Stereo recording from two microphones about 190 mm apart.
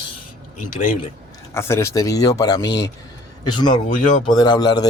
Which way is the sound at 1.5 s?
15° left (ahead or behind).